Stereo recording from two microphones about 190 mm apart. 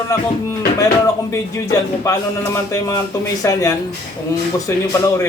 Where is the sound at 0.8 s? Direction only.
15° left (ahead or behind).